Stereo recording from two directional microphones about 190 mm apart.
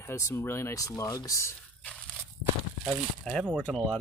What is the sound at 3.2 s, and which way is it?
Speech, centre (ahead or behind).